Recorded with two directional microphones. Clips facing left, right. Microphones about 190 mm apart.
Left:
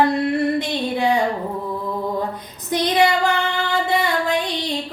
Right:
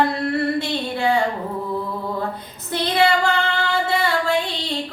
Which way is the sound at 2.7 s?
15° left (ahead or behind).